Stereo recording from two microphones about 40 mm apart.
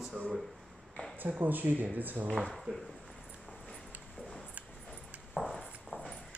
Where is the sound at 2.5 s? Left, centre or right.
Centre.